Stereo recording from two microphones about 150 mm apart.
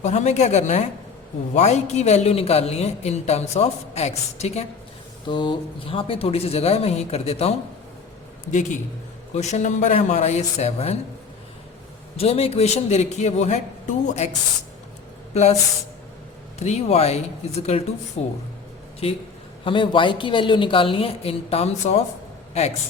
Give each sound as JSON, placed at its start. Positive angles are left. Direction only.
{"t": 0.0, "sound": "speech", "side_deg": 50}
{"t": 5.3, "sound": "speech", "side_deg": 30}
{"t": 8.4, "sound": "a man's voice", "side_deg": 55}
{"t": 12.1, "sound": "speech", "side_deg": 40}
{"t": 15.3, "sound": "speech", "side_deg": 45}
{"t": 16.6, "sound": "speech", "side_deg": 45}
{"t": 18.2, "sound": "speech", "side_deg": 45}